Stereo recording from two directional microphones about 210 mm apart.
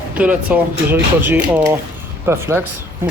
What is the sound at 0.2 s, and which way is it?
Speech, 5° right (ahead or behind).